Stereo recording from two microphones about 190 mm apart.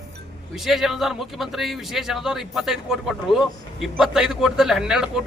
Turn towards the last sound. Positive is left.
turn(degrees=-5)  # may be behind; listen again after turning